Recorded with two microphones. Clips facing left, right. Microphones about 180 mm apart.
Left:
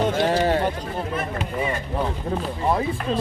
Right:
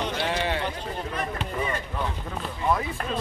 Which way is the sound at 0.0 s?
45° left (ahead or behind).